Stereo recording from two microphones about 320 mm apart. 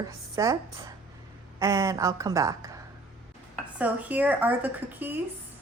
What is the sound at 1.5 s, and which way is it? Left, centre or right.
Speech, centre.